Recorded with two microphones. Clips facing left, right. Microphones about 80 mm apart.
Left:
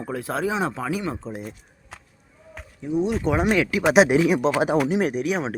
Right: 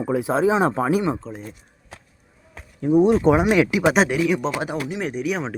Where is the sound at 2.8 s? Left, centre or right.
Right.